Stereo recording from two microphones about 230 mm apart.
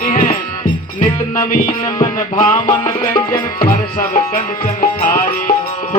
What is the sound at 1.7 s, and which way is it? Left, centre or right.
Music, centre.